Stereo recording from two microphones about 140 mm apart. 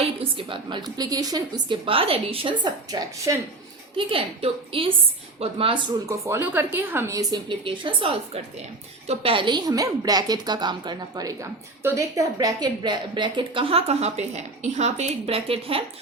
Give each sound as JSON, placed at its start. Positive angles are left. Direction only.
{"t": 0.0, "sound": "a woman's voice", "side_deg": -40}
{"t": 1.7, "sound": "a woman's voice", "side_deg": -40}
{"t": 3.3, "sound": "a woman's voice", "side_deg": -25}
{"t": 3.9, "sound": "a woman's voice", "side_deg": -40}
{"t": 6.1, "sound": "a woman's voice", "side_deg": -20}